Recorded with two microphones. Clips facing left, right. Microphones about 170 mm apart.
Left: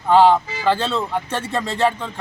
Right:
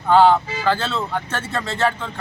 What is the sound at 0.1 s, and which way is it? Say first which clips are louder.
Speech: even; centre (ahead or behind).